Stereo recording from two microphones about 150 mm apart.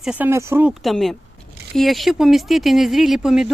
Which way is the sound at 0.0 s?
5° right (ahead or behind).